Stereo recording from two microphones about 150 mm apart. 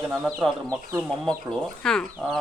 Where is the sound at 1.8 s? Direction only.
5° left (ahead or behind).